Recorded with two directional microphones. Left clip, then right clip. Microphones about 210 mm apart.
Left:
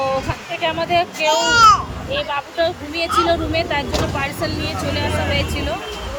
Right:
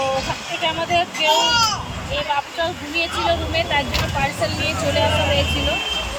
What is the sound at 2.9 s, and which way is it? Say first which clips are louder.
Speech: left 2 dB; 10° left (ahead or behind).